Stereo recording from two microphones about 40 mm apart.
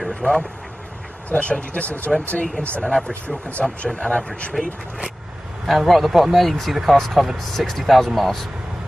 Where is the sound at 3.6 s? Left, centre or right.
Centre.